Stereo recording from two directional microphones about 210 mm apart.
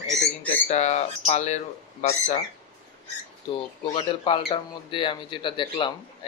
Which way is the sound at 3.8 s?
25° left (ahead or behind).